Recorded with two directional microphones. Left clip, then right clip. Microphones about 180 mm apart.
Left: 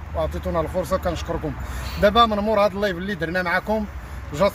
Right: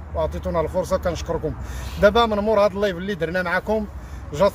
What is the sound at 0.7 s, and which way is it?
Speech, 30° right (ahead or behind).